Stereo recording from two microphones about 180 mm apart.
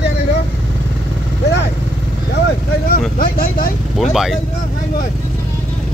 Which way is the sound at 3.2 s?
50° left (ahead or behind).